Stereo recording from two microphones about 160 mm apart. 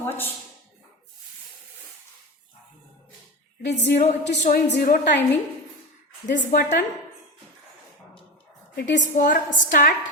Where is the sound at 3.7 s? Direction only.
90° left.